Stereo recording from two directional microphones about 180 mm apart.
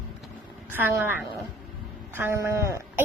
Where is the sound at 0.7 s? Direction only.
10° right (ahead or behind).